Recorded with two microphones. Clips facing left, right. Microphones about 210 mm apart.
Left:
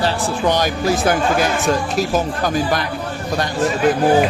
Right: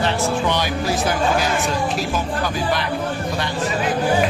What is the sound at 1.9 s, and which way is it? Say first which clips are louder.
Speech: left 4 dB; 45° left (ahead or behind).